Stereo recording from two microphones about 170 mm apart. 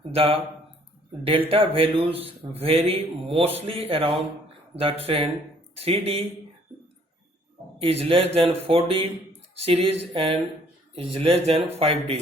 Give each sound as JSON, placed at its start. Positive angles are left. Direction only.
{"t": 0.1, "sound": "a man's voice", "side_deg": -35}
{"t": 7.8, "sound": "a man's voice", "side_deg": -35}